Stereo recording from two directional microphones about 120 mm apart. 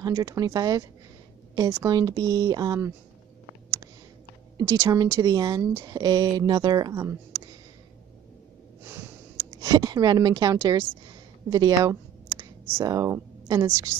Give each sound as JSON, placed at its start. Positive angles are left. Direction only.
{"t": 0.0, "sound": "a woman's voice", "side_deg": -30}
{"t": 1.9, "sound": "speech", "side_deg": -35}
{"t": 4.6, "sound": "a woman's voice", "side_deg": -30}
{"t": 9.6, "sound": "speech", "side_deg": -35}
{"t": 11.5, "sound": "a sound", "side_deg": -30}
{"t": 12.7, "sound": "a woman's voice", "side_deg": -30}